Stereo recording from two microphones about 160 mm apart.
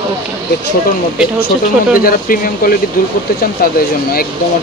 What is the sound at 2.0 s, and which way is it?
Speech, 60° left (ahead or behind).